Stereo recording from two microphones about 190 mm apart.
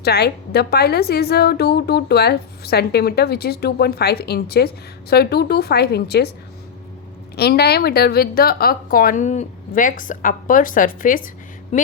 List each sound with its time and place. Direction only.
0.0 s a woman's voice: 60° left (ahead or behind)
7.3 s a woman's voice: 60° left (ahead or behind)
11.7 s speech: 35° left (ahead or behind)